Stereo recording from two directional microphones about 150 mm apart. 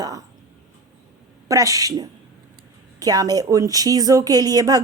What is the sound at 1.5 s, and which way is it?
Speech, 20° right (ahead or behind).